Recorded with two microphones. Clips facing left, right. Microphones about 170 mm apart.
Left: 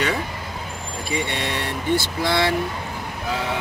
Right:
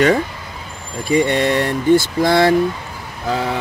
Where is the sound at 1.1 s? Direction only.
45° right (ahead or behind).